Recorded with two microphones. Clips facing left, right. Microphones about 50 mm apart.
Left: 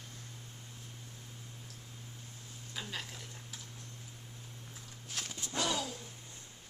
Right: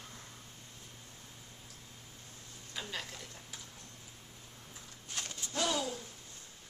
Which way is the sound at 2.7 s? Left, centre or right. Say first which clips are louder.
Right 1 dB; centre.